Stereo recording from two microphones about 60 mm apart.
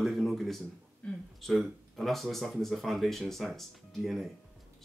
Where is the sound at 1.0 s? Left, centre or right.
Left.